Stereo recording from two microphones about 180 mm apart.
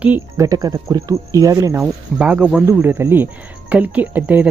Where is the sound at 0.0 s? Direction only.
10° right (ahead or behind).